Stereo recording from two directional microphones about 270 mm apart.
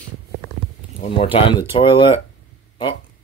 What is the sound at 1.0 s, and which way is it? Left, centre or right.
Speech, left.